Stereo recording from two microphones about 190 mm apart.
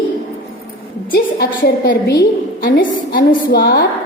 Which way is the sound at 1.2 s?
50° left (ahead or behind).